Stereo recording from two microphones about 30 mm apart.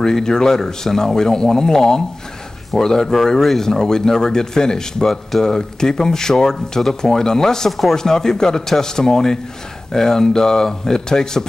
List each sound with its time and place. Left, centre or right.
0.0 s speech: centre